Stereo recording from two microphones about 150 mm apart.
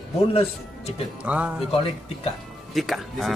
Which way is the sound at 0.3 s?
45° left (ahead or behind).